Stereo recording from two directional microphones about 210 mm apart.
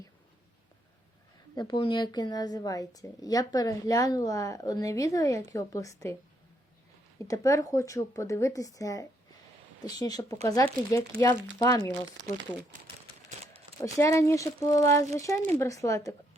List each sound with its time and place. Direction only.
1.5 s a woman's voice: 20° left (ahead or behind)
7.3 s a woman's voice: 15° left (ahead or behind)
13.3 s crumpling: 35° right (ahead or behind)
13.8 s a woman's voice: 15° left (ahead or behind)